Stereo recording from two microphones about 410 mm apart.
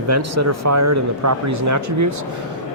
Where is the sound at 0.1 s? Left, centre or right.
Right.